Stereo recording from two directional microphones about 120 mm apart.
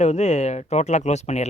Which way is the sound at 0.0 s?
65° left (ahead or behind).